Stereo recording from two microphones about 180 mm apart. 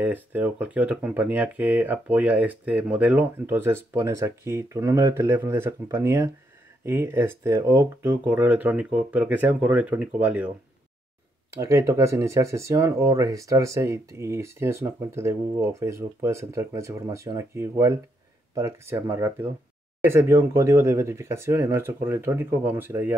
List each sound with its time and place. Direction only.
0.0 s speech: 10° right (ahead or behind)
11.5 s speech: 15° right (ahead or behind)